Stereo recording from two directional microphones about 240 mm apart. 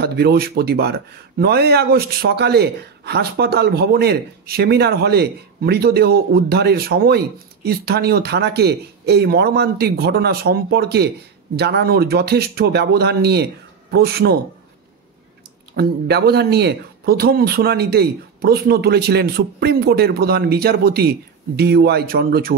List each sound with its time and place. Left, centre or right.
0.0 s a man's voice: right
15.7 s a man's voice: right